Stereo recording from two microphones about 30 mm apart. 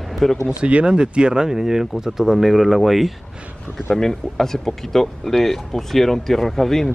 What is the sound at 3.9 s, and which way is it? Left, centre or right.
Speech, centre.